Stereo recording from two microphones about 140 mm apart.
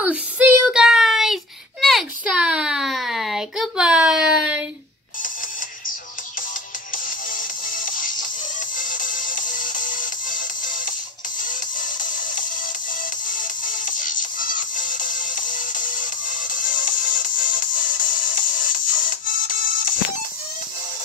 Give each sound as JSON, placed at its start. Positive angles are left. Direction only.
{"t": 0.0, "sound": "child singing", "side_deg": -10}
{"t": 6.9, "sound": "music", "side_deg": 75}